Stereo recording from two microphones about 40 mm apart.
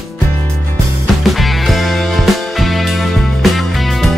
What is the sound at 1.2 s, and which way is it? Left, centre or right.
Music, centre.